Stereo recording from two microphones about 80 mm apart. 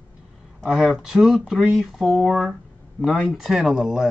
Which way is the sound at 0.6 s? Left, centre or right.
Centre.